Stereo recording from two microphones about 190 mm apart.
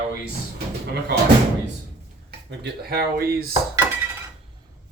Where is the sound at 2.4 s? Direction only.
55° right (ahead or behind).